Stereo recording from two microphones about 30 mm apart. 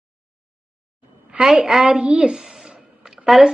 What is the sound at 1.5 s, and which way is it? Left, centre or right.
Speech, centre.